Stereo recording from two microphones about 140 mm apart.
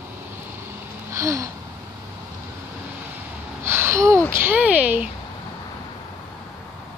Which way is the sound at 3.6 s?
15° right (ahead or behind).